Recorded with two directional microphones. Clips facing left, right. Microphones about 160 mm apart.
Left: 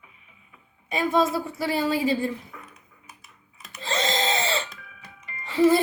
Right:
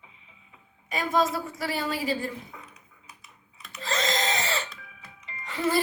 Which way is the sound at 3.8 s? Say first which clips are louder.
Left 2 dB; 30° left (ahead or behind).